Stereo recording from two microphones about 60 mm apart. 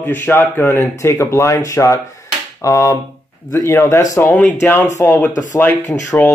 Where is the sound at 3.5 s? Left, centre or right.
Left.